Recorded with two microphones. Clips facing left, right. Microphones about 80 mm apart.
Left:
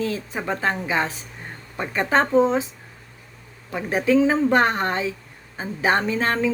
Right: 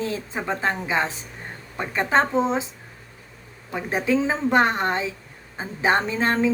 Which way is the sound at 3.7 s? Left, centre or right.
Right.